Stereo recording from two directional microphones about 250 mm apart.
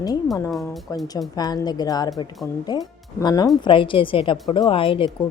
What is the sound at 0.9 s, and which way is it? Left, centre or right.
A woman's voice, centre.